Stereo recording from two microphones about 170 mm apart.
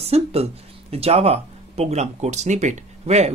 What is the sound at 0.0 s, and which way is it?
Speech, 35° right (ahead or behind).